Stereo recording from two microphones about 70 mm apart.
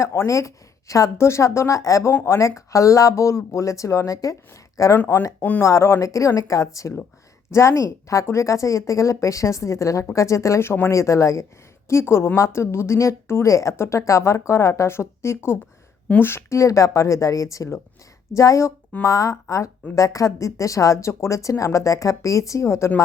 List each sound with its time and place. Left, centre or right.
0.0 s speech: left
5.4 s speech: left
5.6 s a woman's voice: left
16.6 s speech: left